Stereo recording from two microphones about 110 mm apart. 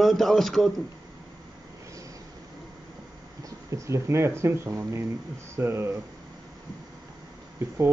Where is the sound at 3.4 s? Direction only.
30° right (ahead or behind).